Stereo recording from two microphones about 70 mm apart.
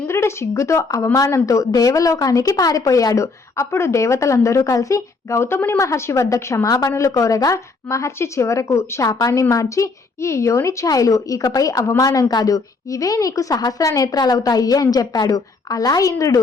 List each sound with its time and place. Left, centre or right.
0.0 s speech: left
1.1 s a woman's voice: left
6.9 s speech: left
9.0 s a woman's voice: left